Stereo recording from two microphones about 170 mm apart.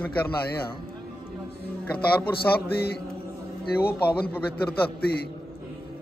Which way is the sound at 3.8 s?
65° left (ahead or behind).